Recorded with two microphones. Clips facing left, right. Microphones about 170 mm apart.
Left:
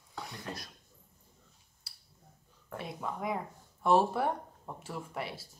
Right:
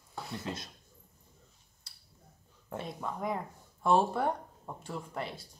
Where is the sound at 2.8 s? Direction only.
Centre (ahead or behind).